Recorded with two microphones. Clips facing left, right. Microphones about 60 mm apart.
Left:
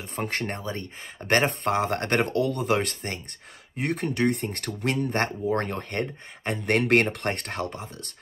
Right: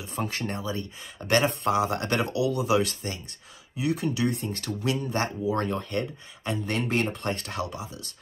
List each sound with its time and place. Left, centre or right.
0.1 s speech: left